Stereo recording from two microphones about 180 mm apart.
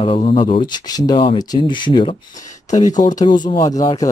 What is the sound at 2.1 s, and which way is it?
Speech, 45° left (ahead or behind).